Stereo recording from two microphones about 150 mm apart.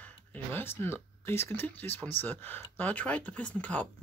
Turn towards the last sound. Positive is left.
turn(degrees=10)  # may be behind; listen again after turning